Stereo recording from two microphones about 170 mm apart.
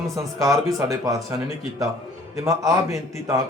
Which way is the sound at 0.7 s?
20° right (ahead or behind).